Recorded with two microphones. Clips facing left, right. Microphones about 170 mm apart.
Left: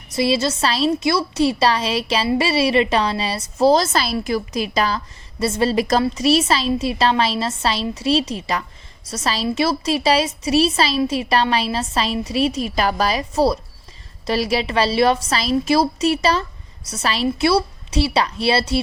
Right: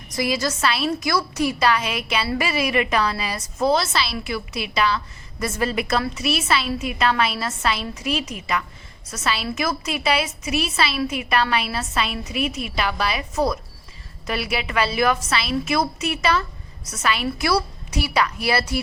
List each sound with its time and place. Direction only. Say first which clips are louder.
0.1 s a woman's voice: left 5 dB; 25° left (ahead or behind)